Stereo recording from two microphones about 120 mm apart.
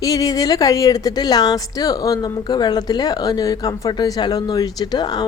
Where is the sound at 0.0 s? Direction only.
30° left (ahead or behind).